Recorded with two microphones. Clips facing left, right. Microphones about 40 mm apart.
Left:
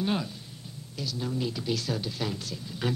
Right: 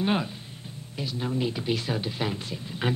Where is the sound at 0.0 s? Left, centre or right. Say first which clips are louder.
Right 3 dB; right.